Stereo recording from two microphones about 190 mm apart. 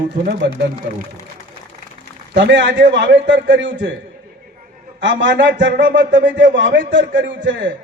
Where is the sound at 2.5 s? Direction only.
65° right (ahead or behind).